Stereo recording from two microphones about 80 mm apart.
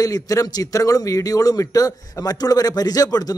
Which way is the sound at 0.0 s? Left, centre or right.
Left.